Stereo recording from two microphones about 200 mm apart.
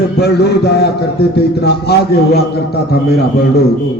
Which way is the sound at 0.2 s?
55° left (ahead or behind).